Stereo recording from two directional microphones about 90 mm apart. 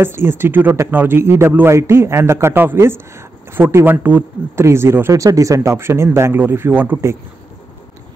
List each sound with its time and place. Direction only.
0.0 s a man's voice: 25° right (ahead or behind)
5.2 s a man's voice: 40° right (ahead or behind)